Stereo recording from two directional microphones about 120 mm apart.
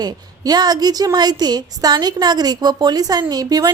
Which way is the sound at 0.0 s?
35° right (ahead or behind).